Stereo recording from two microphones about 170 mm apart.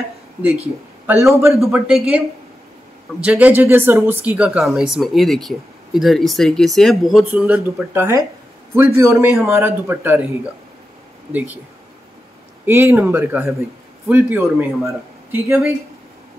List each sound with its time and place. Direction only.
1.0 s speech: 15° right (ahead or behind)
1.6 s speech: centre (ahead or behind)
3.3 s speech: 10° right (ahead or behind)
11.3 s speech: 10° right (ahead or behind)
12.6 s speech: 15° right (ahead or behind)